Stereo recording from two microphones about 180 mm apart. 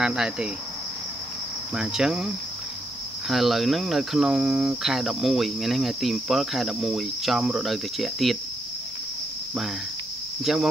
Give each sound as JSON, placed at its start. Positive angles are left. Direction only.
{"t": 0.0, "sound": "cricket", "side_deg": -5}
{"t": 1.8, "sound": "cricket", "side_deg": -5}
{"t": 10.4, "sound": "cricket", "side_deg": 0}